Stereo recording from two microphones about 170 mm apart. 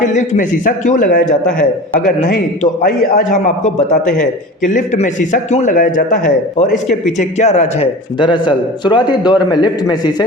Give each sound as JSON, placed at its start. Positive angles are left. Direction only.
{"t": 0.0, "sound": "a man's voice", "side_deg": 45}
{"t": 1.5, "sound": "a man's voice", "side_deg": 5}
{"t": 2.0, "sound": "a man's voice", "side_deg": 55}
{"t": 8.2, "sound": "a man's voice", "side_deg": 25}